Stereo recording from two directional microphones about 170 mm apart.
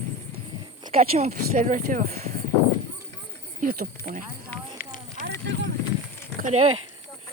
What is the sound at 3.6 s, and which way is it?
Speech, 60° right (ahead or behind).